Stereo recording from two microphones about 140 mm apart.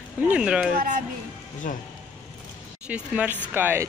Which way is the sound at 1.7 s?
90° left.